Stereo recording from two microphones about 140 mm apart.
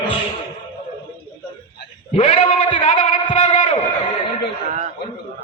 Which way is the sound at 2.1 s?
45° left (ahead or behind).